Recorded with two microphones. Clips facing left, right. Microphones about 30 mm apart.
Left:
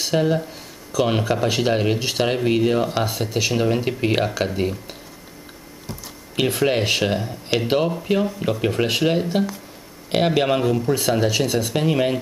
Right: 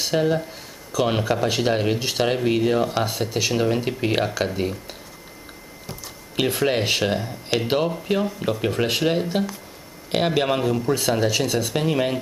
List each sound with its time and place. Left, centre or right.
0.0 s speech: centre
6.3 s speech: centre